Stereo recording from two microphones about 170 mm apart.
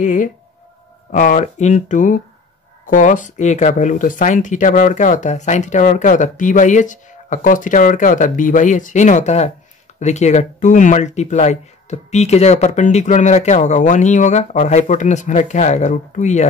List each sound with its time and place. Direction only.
0.0 s speech: 50° left (ahead or behind)